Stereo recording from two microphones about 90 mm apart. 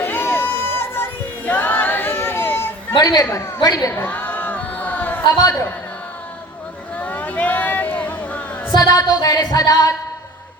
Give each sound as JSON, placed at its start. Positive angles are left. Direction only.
{"t": 0.0, "sound": "music", "side_deg": 25}
{"t": 1.5, "sound": "choir", "side_deg": 20}
{"t": 2.9, "sound": "music", "side_deg": 50}
{"t": 3.2, "sound": "a woman's voice", "side_deg": 30}
{"t": 4.0, "sound": "crowd", "side_deg": 20}
{"t": 5.2, "sound": "music", "side_deg": 45}
{"t": 6.9, "sound": "a sound", "side_deg": 15}
{"t": 8.7, "sound": "music", "side_deg": 45}